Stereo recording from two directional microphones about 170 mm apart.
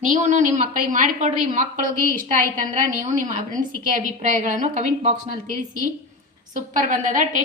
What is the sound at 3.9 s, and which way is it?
Speech, 50° right (ahead or behind).